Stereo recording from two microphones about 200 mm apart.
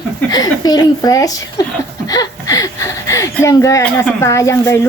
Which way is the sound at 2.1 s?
15° left (ahead or behind).